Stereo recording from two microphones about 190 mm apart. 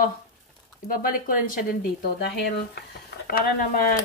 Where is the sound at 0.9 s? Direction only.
50° left (ahead or behind).